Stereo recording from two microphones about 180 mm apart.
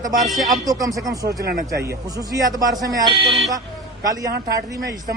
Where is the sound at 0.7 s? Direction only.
20° right (ahead or behind).